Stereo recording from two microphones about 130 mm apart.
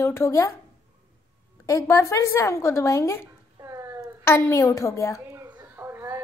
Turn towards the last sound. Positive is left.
turn(degrees=-20)  # may be behind; listen again after turning